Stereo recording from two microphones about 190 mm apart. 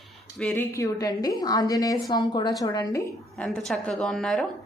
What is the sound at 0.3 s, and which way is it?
Speech, 5° left (ahead or behind).